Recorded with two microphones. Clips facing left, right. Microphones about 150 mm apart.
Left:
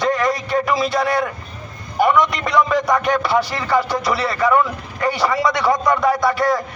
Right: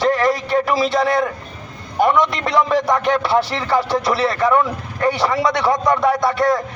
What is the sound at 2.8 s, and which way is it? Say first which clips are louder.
Speech: right 1 dB; 25° right (ahead or behind).